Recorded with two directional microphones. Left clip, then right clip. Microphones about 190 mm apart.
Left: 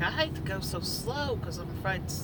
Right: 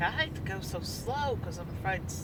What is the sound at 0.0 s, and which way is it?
Vehicle, 25° left (ahead or behind).